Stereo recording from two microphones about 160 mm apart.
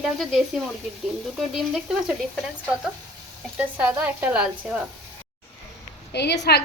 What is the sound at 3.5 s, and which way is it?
Speech, 10° right (ahead or behind).